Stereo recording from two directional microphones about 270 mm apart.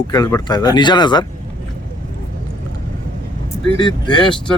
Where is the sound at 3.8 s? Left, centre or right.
Centre.